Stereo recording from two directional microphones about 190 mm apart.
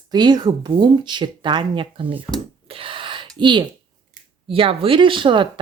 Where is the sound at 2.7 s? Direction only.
30° right (ahead or behind).